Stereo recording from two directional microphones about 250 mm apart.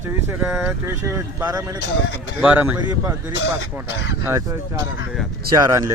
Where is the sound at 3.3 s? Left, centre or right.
Left.